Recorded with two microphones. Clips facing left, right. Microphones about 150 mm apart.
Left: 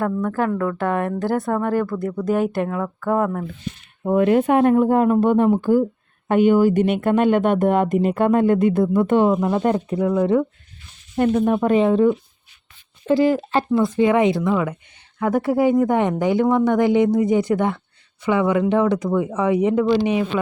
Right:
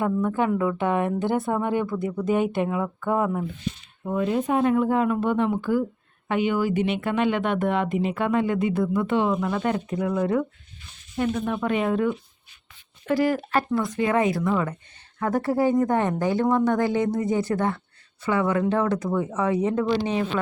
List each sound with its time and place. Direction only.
0.0 s speech: 5° right (ahead or behind)
4.0 s speech: 60° left (ahead or behind)
4.7 s speech: 50° left (ahead or behind)
11.2 s speech: 45° left (ahead or behind)
13.1 s speech: 25° left (ahead or behind)
14.5 s speech: 10° left (ahead or behind)